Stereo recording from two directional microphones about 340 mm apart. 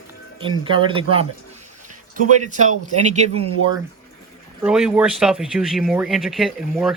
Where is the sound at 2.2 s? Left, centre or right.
Right.